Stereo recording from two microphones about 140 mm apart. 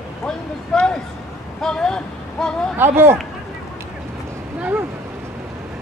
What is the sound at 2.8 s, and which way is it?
Speech, 15° right (ahead or behind).